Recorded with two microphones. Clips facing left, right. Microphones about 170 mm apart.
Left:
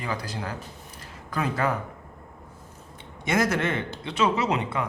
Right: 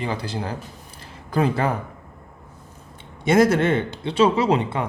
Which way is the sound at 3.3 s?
30° right (ahead or behind).